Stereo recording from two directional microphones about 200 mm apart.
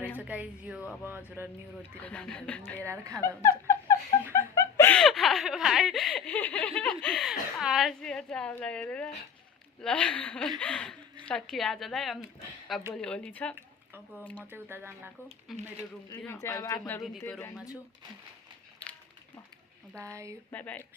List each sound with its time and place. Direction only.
0.2 s speech: 5° right (ahead or behind)
2.0 s speech: 5° left (ahead or behind)
2.8 s speech: 15° right (ahead or behind)
3.2 s a woman's voice: 15° left (ahead or behind)
14.5 s speech: 10° right (ahead or behind)
16.2 s speech: 10° left (ahead or behind)
20.0 s speech: 15° right (ahead or behind)
20.5 s speech: 10° left (ahead or behind)